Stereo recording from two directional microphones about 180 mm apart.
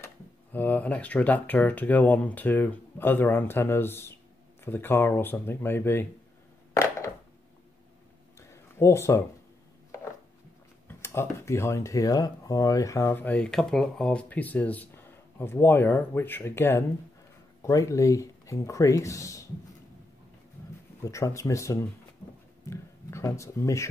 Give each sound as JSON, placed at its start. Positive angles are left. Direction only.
{"t": 0.0, "sound": "speech", "side_deg": 10}
{"t": 6.7, "sound": "crushing", "side_deg": 20}
{"t": 8.4, "sound": "a sound", "side_deg": 15}
{"t": 11.0, "sound": "speech", "side_deg": 15}
{"t": 21.0, "sound": "speech", "side_deg": 15}